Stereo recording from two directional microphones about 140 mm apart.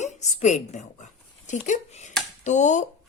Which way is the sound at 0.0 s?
55° left (ahead or behind).